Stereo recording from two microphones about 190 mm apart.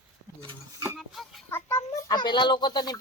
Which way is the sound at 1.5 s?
15° left (ahead or behind).